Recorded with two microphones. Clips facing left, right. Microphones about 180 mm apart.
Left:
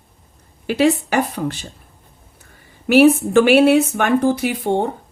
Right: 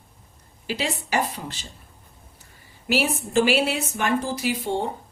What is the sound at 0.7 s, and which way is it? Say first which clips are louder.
Speech: left 10 dB; 60° left (ahead or behind).